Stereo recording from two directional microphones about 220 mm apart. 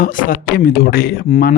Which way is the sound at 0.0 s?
40° left (ahead or behind).